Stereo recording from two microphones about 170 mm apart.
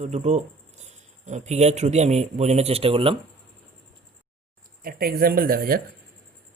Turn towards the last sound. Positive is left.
turn(degrees=-60)  # may be behind; listen again after turning